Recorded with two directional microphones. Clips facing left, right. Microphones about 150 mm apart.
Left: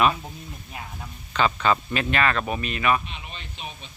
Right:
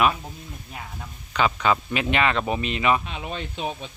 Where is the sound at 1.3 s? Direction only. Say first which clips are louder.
Even; 10° right (ahead or behind).